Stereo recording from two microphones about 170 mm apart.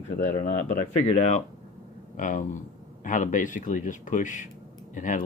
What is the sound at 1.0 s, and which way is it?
Speech, 45° left (ahead or behind).